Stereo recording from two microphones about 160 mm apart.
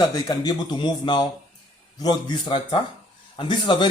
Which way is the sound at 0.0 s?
25° left (ahead or behind).